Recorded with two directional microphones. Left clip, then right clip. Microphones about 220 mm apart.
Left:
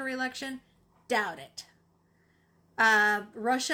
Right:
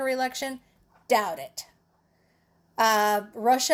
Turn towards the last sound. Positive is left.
turn(degrees=-15)  # may be behind; listen again after turning